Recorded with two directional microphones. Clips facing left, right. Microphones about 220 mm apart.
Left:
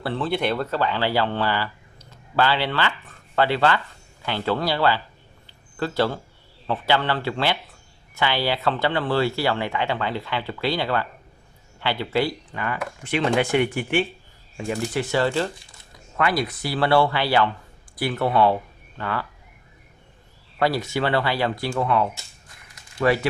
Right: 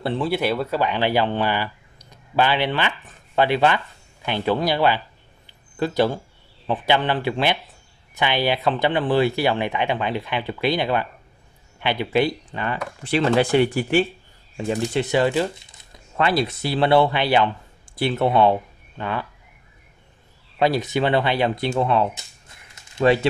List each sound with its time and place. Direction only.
0.0 s speech: 20° right (ahead or behind)
0.3 s speech: 5° right (ahead or behind)
5.5 s a sound: 15° right (ahead or behind)
6.7 s speech: 15° right (ahead or behind); by 14.0 s 35° right (ahead or behind)
14.7 s speech: 20° right (ahead or behind)
20.5 s speech: 20° right (ahead or behind)